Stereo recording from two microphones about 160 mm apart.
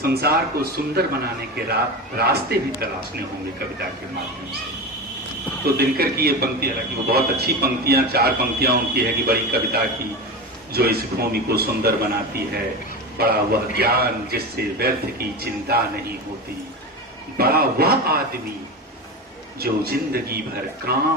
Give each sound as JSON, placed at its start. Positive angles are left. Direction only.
{"t": 0.0, "sound": "a man's voice", "side_deg": -75}
{"t": 5.6, "sound": "a man's voice", "side_deg": -75}
{"t": 17.3, "sound": "a man's voice", "side_deg": -75}
{"t": 19.5, "sound": "a man's voice", "side_deg": -75}